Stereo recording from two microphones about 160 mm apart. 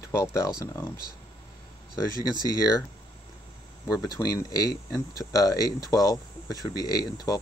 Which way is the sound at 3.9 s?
25° left (ahead or behind).